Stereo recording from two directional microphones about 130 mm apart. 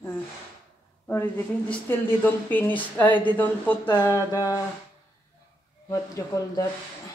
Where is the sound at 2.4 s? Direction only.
15° left (ahead or behind).